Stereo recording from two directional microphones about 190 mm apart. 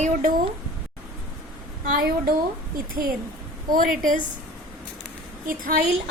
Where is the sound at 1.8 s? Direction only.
50° right (ahead or behind).